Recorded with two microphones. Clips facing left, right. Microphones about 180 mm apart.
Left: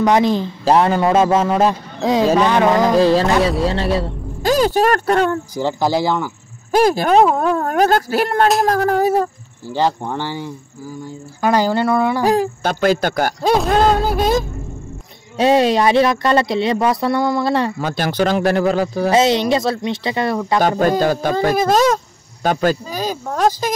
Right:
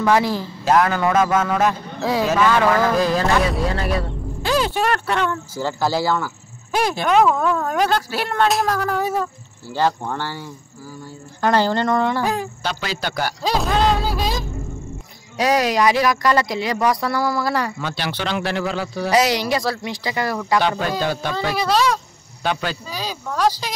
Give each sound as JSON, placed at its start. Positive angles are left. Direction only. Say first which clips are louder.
{"t": 0.0, "sound": "speech", "louder": "left 4 dB", "side_deg": 20}
{"t": 2.9, "sound": "speech", "louder": "left 5 dB", "side_deg": 30}
{"t": 4.4, "sound": "speech", "louder": "left 6 dB", "side_deg": 40}
{"t": 5.5, "sound": "speech", "louder": "left 4 dB", "side_deg": 15}
{"t": 6.7, "sound": "speech", "louder": "left 5 dB", "side_deg": 40}
{"t": 9.7, "sound": "speech", "louder": "left 2 dB", "side_deg": 15}
{"t": 12.3, "sound": "speech", "louder": "left 7 dB", "side_deg": 45}
{"t": 15.3, "sound": "speech", "louder": "left 5 dB", "side_deg": 25}
{"t": 17.7, "sound": "speech", "louder": "left 7 dB", "side_deg": 45}
{"t": 19.0, "sound": "speech", "louder": "left 3 dB", "side_deg": 25}
{"t": 20.8, "sound": "speech", "louder": "left 7 dB", "side_deg": 45}